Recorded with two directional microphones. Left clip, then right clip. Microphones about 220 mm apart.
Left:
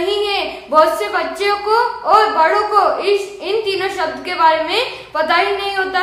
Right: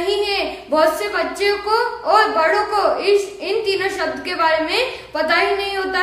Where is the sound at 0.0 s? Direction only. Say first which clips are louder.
Left 2 dB; centre (ahead or behind).